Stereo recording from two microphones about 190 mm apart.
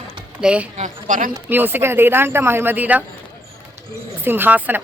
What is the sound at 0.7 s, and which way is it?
Speech, 40° right (ahead or behind).